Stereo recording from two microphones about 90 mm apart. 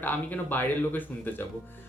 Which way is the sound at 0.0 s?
20° left (ahead or behind).